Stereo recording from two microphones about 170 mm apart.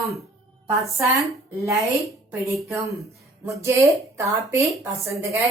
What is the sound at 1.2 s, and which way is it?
Speech, 15° right (ahead or behind).